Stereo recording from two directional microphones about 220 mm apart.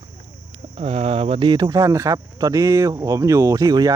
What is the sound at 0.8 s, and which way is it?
Speech, 30° right (ahead or behind).